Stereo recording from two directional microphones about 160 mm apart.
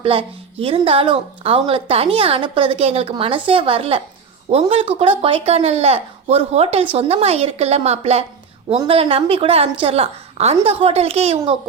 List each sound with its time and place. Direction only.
0.0 s a woman's voice: 35° right (ahead or behind)